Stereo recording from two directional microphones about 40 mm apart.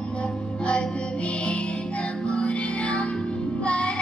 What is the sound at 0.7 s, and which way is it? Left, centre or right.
Music, left.